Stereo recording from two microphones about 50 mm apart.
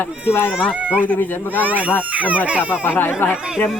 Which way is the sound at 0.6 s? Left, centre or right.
Left.